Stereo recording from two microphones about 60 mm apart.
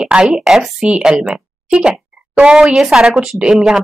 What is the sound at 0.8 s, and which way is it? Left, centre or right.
A woman's voice, centre.